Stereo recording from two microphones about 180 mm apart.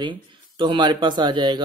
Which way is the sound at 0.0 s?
25° right (ahead or behind).